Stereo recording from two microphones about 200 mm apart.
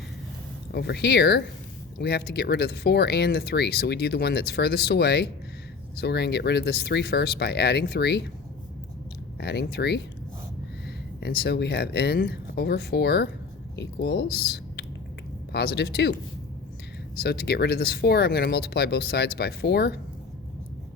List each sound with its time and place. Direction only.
0.7 s speech: 55° left (ahead or behind)
9.4 s speech: 55° left (ahead or behind)
17.2 s speech: 50° left (ahead or behind)